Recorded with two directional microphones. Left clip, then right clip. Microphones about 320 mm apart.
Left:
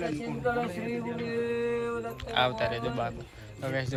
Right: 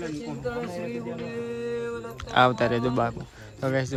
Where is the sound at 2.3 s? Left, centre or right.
Centre.